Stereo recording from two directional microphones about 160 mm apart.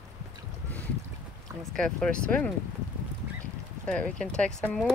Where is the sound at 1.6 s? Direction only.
5° left (ahead or behind).